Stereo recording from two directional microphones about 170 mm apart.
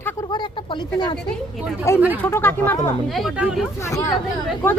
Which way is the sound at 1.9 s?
15° left (ahead or behind).